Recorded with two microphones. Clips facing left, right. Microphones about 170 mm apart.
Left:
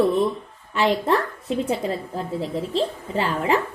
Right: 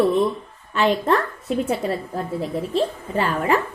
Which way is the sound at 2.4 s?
10° right (ahead or behind).